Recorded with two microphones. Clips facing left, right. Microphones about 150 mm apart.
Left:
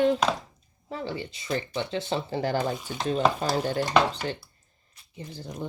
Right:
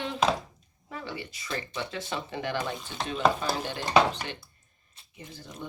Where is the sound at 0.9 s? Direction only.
30° left (ahead or behind).